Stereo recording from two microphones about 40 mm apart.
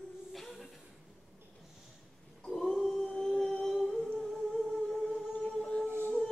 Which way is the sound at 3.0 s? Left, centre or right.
Centre.